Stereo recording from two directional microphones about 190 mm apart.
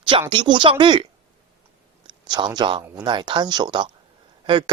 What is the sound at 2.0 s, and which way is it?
Speech, 25° right (ahead or behind).